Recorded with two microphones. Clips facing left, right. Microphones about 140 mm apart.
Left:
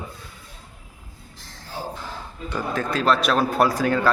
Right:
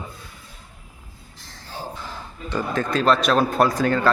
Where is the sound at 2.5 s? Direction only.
10° left (ahead or behind).